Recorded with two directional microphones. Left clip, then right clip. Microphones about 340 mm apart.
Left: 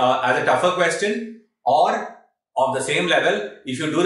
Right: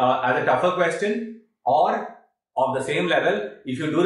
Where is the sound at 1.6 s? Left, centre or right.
Centre.